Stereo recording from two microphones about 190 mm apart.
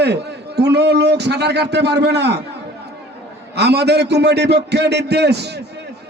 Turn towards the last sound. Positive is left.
turn(degrees=-60)  # may be behind; listen again after turning